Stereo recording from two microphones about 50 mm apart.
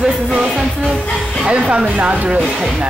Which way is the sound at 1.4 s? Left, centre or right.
Centre.